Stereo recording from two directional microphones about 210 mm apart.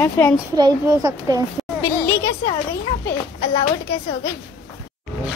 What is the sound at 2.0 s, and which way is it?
A woman's voice, 15° left (ahead or behind).